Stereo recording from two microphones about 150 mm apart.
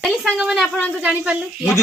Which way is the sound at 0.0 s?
Centre (ahead or behind).